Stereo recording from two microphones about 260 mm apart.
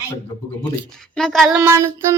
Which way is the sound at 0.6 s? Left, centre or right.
Centre.